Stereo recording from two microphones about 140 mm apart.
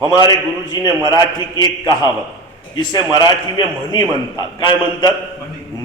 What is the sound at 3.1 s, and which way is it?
A man's voice, 30° left (ahead or behind).